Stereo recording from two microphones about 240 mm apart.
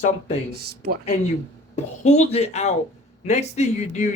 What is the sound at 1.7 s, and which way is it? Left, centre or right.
Speech, left.